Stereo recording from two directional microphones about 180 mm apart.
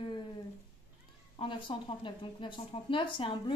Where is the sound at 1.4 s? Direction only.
25° left (ahead or behind).